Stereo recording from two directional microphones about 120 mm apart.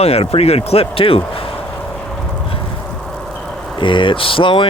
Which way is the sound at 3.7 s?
45° left (ahead or behind).